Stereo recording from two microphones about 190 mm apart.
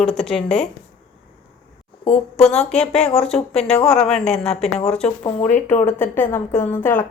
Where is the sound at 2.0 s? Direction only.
30° left (ahead or behind).